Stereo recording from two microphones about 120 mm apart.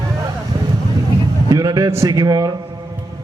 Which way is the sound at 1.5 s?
30° right (ahead or behind).